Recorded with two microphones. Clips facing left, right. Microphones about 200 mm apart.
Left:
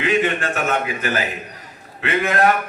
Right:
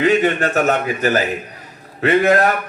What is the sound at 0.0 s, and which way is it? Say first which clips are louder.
Speech: right 5 dB; 40° right (ahead or behind).